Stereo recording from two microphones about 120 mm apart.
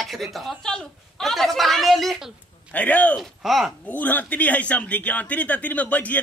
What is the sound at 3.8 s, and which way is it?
A man's voice, 15° left (ahead or behind).